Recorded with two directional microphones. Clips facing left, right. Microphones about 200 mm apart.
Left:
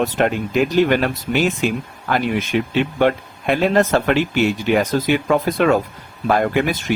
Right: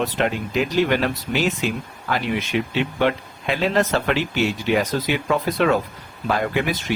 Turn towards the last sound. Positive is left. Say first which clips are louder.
# left 4 dB
turn(degrees=50)  # may be behind; listen again after turning